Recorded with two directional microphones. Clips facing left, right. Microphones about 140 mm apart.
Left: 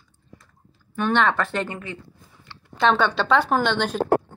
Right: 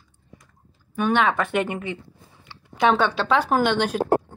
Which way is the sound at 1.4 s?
20° right (ahead or behind).